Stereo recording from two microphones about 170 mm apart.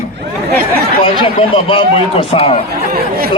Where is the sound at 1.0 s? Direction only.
30° left (ahead or behind).